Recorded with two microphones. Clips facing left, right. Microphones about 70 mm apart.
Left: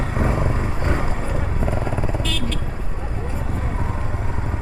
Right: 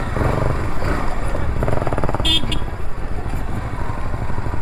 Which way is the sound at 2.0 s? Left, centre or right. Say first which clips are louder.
Right 3 dB; right.